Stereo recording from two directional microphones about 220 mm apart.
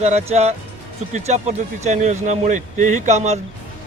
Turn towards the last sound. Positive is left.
turn(degrees=-30)  # may be behind; listen again after turning